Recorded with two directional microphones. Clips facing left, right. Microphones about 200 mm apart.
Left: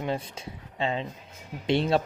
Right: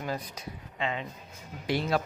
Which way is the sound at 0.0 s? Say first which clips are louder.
Left 4 dB; 25° left (ahead or behind).